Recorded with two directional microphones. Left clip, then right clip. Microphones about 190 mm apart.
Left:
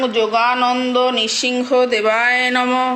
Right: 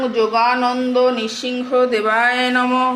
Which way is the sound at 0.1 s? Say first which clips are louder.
Even; 20° left (ahead or behind).